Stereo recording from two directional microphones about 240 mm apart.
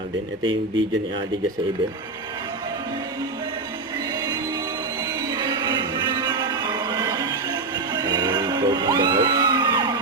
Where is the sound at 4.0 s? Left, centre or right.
Centre.